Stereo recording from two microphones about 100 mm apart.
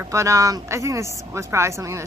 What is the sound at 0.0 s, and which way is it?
A woman's voice, 30° right (ahead or behind).